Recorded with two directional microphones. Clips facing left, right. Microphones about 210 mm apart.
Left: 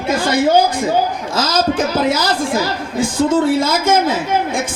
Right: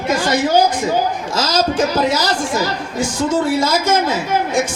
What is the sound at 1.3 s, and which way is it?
A woman's voice, 55° left (ahead or behind).